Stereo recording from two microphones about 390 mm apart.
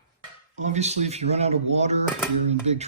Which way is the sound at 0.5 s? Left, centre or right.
Centre.